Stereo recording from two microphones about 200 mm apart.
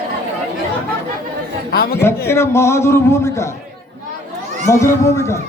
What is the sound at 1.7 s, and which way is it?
Speech, 55° left (ahead or behind).